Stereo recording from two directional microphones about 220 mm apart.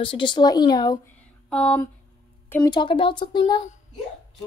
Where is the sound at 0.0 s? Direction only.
20° left (ahead or behind).